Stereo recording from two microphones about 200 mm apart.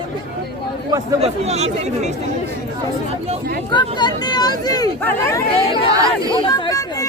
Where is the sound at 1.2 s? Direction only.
35° right (ahead or behind).